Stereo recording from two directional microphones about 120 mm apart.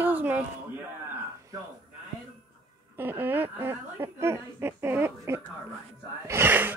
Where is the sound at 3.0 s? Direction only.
15° right (ahead or behind).